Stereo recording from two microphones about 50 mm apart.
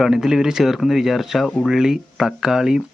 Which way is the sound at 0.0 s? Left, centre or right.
Centre.